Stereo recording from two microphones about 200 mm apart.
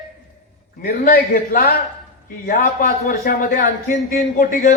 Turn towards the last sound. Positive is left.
turn(degrees=40)  # may be behind; listen again after turning